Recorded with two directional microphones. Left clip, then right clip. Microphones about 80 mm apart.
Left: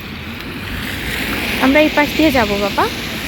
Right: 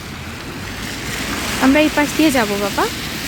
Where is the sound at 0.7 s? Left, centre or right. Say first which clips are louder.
Left 4 dB; right.